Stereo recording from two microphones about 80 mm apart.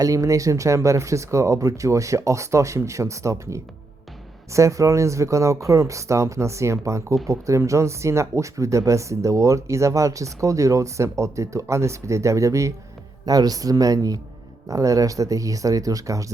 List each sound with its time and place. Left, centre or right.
0.0 s speech: right